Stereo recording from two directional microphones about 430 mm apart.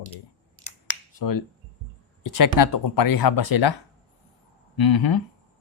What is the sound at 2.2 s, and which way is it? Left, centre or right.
Speech, left.